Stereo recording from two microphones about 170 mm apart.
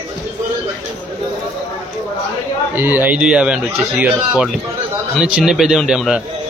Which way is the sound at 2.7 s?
10° right (ahead or behind).